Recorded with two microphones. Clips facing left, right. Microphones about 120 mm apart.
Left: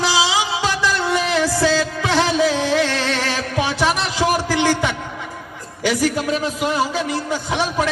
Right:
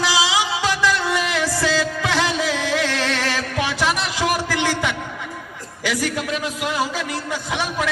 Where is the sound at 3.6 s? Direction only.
30° left (ahead or behind).